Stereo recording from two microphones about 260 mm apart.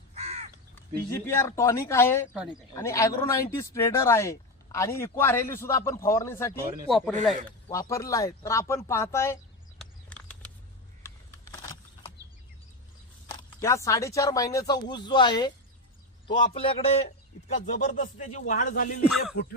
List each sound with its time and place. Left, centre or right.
0.1 s crow: right
1.1 s speech: centre
7.7 s speech: centre
9.7 s a sound: centre
11.0 s vehicle: centre
13.6 s speech: centre; by 19.0 s left